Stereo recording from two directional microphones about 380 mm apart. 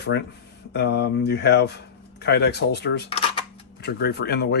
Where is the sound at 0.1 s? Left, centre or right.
Left.